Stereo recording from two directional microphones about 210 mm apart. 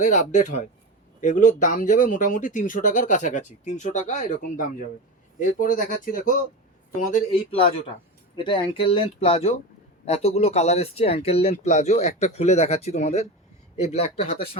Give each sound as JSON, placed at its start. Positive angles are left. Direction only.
{"t": 0.0, "sound": "speech", "side_deg": 35}
{"t": 7.1, "sound": "speech", "side_deg": 25}